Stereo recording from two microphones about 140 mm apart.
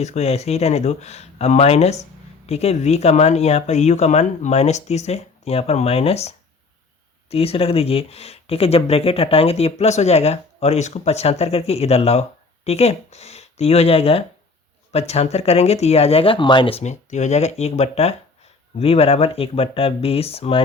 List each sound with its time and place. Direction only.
0.0 s speech: 50° left (ahead or behind)